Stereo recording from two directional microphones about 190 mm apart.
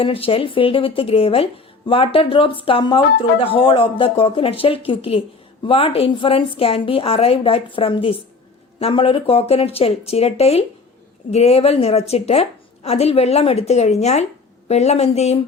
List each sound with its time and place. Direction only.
0.0 s a woman's voice: 30° left (ahead or behind)